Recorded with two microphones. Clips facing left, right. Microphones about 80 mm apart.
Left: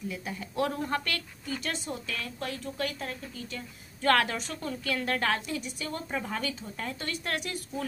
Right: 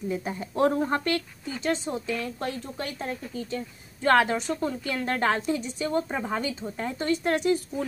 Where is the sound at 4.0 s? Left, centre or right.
Centre.